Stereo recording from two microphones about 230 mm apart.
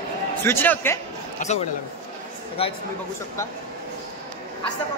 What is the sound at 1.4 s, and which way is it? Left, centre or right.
Speech, left.